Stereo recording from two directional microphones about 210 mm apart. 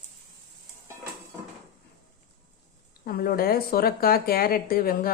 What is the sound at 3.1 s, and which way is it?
Speech, 45° left (ahead or behind).